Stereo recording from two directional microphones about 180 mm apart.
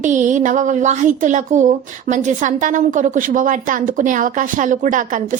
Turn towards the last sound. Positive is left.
turn(degrees=-45)  # may be behind; listen again after turning